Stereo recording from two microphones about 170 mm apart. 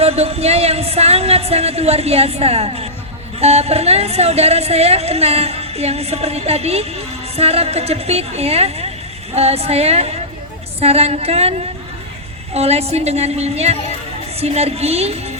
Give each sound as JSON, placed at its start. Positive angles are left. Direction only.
{"t": 0.0, "sound": "a woman's voice", "side_deg": -35}
{"t": 12.5, "sound": "a woman's voice", "side_deg": -40}